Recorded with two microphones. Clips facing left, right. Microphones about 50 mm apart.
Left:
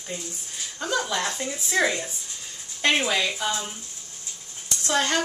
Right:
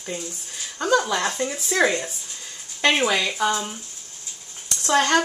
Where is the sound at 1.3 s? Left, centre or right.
Right.